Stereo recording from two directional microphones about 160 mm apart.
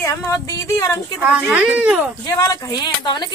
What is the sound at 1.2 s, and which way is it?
Speech, 10° right (ahead or behind).